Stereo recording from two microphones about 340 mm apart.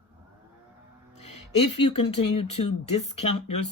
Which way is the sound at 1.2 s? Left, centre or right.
Left.